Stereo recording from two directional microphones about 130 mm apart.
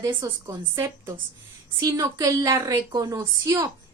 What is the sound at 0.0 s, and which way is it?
A child's voice, 25° right (ahead or behind).